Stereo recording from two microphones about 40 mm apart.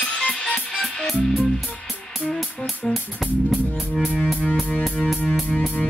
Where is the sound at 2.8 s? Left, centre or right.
Centre.